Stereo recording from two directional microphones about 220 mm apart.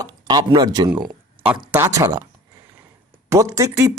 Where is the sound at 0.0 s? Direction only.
15° right (ahead or behind).